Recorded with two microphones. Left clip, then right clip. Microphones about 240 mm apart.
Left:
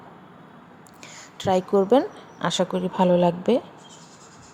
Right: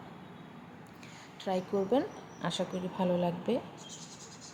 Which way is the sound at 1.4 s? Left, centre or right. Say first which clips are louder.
Left 12 dB; left.